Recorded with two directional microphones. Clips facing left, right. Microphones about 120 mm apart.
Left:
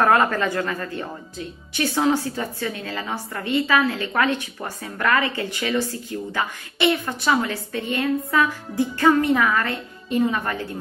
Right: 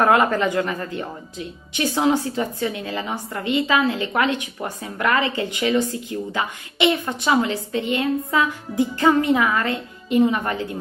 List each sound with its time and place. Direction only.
0.0 s a woman's voice: 15° right (ahead or behind)